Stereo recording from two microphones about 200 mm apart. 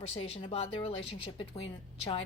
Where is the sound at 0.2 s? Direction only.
30° left (ahead or behind).